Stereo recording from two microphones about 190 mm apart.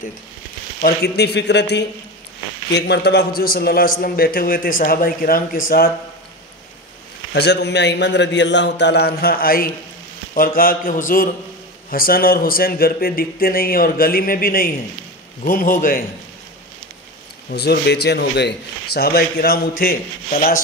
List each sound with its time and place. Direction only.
0.7 s a man's voice: 55° left (ahead or behind)
7.3 s a man's voice: 60° left (ahead or behind); by 16.1 s 45° left (ahead or behind)
17.5 s a man's voice: 60° left (ahead or behind)